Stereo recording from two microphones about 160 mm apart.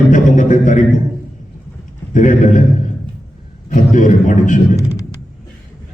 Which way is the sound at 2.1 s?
50° left (ahead or behind).